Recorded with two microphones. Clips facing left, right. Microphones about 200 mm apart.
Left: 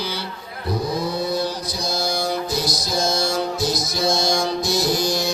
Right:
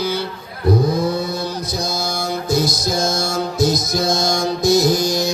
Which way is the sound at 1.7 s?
50° right (ahead or behind).